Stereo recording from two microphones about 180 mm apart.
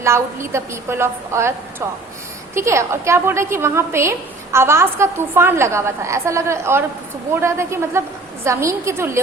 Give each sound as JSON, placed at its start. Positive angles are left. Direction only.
{"t": 0.0, "sound": "a woman's voice", "side_deg": -15}
{"t": 2.6, "sound": "a woman's voice", "side_deg": -15}